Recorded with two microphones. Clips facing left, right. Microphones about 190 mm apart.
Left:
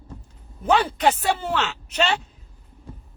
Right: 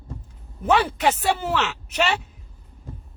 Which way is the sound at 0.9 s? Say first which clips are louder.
Left 1 dB; 10° right (ahead or behind).